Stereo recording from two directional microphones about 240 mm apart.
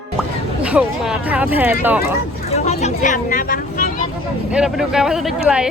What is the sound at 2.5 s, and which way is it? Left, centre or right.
Vehicle, left.